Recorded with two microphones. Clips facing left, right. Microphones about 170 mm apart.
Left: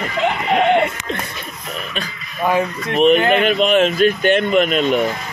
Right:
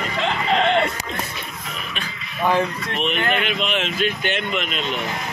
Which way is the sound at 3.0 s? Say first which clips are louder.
Left 10 dB; 40° left (ahead or behind).